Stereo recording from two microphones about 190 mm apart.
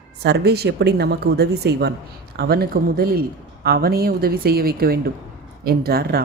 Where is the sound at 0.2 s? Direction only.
60° right (ahead or behind).